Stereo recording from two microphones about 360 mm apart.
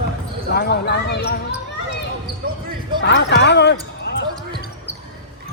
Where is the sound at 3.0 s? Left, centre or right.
Left.